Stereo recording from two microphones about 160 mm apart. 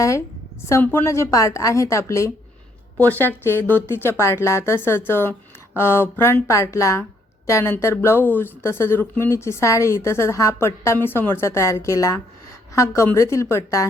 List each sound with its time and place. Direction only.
0.7 s a woman's voice: 15° left (ahead or behind)